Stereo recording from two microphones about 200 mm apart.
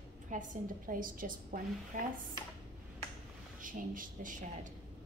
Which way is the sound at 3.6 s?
40° right (ahead or behind).